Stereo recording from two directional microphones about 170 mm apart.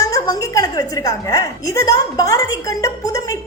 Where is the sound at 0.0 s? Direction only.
20° left (ahead or behind).